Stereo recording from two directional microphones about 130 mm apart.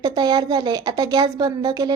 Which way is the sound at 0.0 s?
30° right (ahead or behind).